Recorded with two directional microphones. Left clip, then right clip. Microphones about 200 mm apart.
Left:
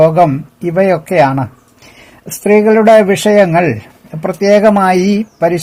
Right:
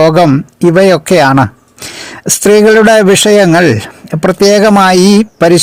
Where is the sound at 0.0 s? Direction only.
40° right (ahead or behind).